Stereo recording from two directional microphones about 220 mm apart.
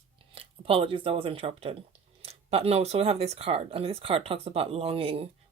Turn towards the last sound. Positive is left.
turn(degrees=-25)  # may be behind; listen again after turning